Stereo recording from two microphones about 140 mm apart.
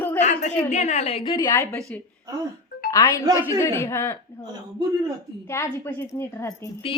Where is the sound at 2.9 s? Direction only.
20° left (ahead or behind).